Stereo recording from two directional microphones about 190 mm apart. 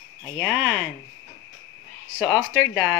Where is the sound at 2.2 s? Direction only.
10° left (ahead or behind).